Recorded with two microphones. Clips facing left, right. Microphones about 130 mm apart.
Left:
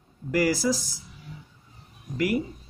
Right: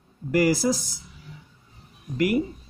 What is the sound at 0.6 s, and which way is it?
Speech, 55° right (ahead or behind).